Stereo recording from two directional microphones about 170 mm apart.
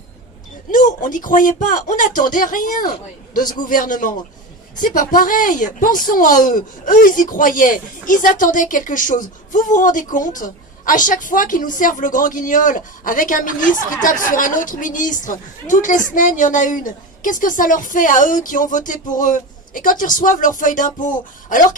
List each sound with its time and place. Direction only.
0.7 s speech: 50° left (ahead or behind)